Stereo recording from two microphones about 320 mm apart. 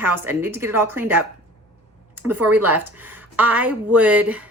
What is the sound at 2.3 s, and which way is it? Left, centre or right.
Speech, centre.